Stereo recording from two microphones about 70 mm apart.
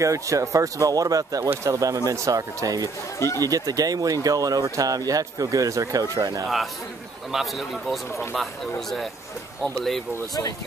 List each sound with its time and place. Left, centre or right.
0.0 s speech: right
6.4 s speech: centre